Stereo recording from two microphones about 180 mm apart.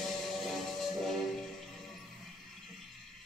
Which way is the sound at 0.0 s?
Centre (ahead or behind).